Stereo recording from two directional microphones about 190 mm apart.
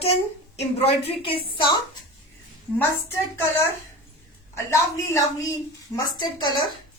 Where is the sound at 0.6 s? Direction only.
30° left (ahead or behind).